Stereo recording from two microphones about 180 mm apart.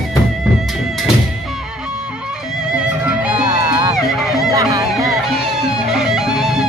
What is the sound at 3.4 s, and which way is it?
Music, 20° right (ahead or behind).